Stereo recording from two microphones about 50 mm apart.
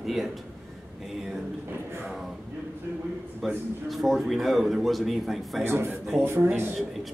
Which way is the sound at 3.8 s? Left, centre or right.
Centre.